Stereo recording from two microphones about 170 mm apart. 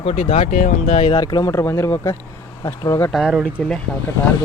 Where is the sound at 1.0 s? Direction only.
25° left (ahead or behind).